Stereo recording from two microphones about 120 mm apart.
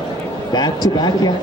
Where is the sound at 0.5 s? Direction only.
35° left (ahead or behind).